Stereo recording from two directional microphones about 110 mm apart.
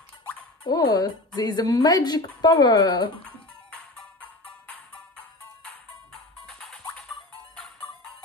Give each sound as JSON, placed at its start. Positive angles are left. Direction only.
{"t": 0.7, "sound": "a woman's voice", "side_deg": 35}
{"t": 3.7, "sound": "music", "side_deg": 10}